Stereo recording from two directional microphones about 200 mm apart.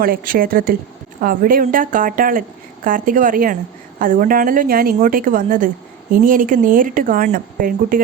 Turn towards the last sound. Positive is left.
turn(degrees=-45)  # may be behind; listen again after turning